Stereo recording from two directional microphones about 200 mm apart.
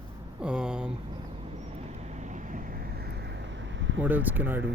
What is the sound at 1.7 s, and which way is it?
Vehicle, 35° right (ahead or behind).